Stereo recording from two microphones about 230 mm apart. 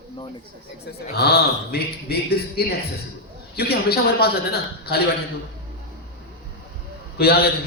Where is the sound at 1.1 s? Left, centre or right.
Left.